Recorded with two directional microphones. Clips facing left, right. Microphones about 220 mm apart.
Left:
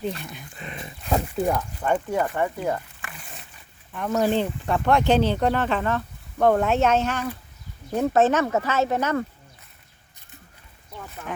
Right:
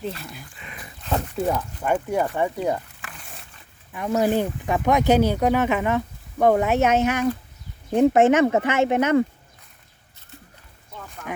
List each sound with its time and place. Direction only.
0.5 s dog: 35° left (ahead or behind)
1.0 s wild animals: 10° left (ahead or behind)
1.4 s speech: 5° right (ahead or behind)
3.0 s wild animals: 5° left (ahead or behind)
3.9 s speech: 10° right (ahead or behind)
11.3 s speech: 15° right (ahead or behind)